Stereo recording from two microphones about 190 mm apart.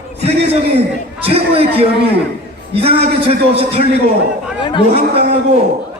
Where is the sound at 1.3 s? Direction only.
30° right (ahead or behind).